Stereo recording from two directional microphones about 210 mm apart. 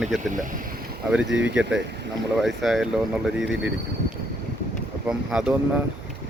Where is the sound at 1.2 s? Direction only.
60° right (ahead or behind).